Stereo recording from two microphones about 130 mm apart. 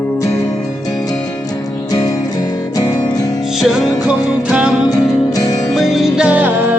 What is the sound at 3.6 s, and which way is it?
Music, 5° right (ahead or behind).